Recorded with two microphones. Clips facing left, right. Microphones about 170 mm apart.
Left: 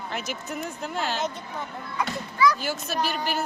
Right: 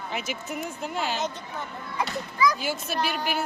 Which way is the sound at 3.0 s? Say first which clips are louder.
Even; 10° right (ahead or behind).